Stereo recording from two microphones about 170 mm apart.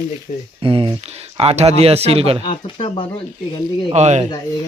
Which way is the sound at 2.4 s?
35° left (ahead or behind).